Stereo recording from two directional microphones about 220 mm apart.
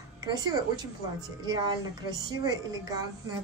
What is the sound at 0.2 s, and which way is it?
Speech, 20° right (ahead or behind).